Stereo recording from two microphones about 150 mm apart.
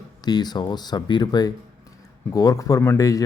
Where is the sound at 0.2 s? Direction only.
25° left (ahead or behind).